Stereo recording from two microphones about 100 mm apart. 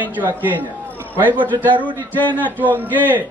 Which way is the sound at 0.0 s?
20° right (ahead or behind).